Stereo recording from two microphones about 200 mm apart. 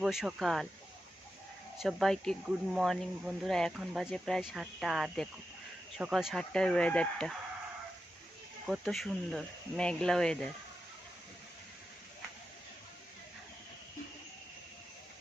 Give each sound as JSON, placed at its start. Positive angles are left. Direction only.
{"t": 0.0, "sound": "speech", "side_deg": 0}
{"t": 1.8, "sound": "speech", "side_deg": 0}
{"t": 8.6, "sound": "speech", "side_deg": 0}